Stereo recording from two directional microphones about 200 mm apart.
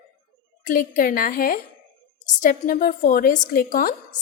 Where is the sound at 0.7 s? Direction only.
45° left (ahead or behind).